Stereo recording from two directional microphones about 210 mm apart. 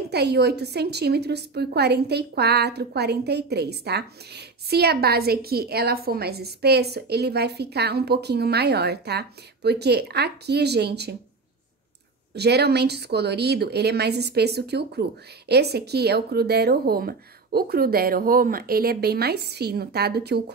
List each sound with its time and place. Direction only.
0.1 s a woman's voice: 50° right (ahead or behind)
12.4 s a woman's voice: 50° right (ahead or behind)